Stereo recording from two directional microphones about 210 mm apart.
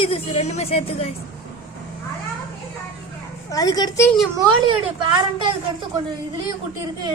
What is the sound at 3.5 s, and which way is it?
Speech, 15° left (ahead or behind).